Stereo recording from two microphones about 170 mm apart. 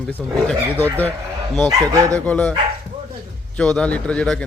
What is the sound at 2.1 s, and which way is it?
Speech, 10° left (ahead or behind).